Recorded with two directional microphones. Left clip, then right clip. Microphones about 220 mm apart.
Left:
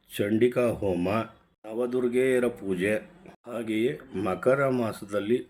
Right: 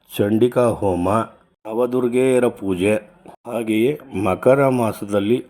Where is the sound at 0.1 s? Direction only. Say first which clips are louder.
Right 7 dB; 20° right (ahead or behind).